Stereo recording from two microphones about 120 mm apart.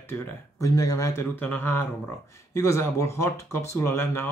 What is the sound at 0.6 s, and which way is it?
Speech, 30° left (ahead or behind).